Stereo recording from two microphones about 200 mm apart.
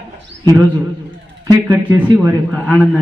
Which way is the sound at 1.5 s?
10° right (ahead or behind).